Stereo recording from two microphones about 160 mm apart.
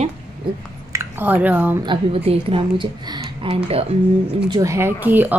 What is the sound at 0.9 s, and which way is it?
Speech, 10° right (ahead or behind).